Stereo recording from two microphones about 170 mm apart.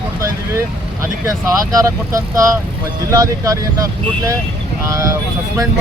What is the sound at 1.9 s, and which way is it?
Speech, 20° right (ahead or behind).